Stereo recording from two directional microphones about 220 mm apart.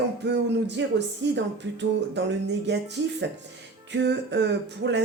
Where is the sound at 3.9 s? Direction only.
50° right (ahead or behind).